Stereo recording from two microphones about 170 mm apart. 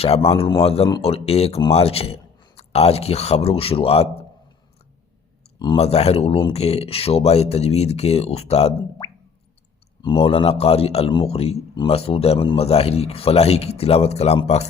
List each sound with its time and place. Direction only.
0.0 s a man's voice: 35° left (ahead or behind)
5.5 s a man's voice: 30° left (ahead or behind)
10.0 s a man's voice: 30° left (ahead or behind)